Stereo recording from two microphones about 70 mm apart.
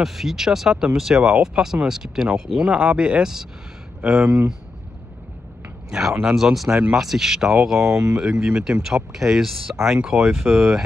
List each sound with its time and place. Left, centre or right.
0.0 s speech: centre
2.7 s speech: centre
5.9 s speech: centre